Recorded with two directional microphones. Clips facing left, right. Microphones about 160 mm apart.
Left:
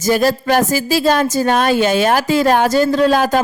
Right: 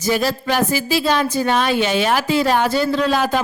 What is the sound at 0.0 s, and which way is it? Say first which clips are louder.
A woman's voice: left 5 dB; 45° left (ahead or behind).